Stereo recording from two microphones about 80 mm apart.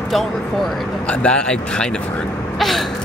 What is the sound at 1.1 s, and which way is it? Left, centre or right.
Speech, centre.